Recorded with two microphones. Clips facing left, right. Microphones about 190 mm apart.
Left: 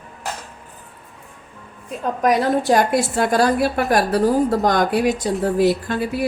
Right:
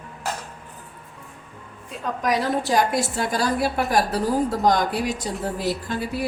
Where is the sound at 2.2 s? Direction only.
55° left (ahead or behind).